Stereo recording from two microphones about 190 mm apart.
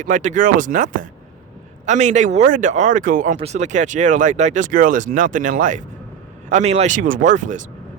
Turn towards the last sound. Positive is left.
turn(degrees=-40)  # may be behind; listen again after turning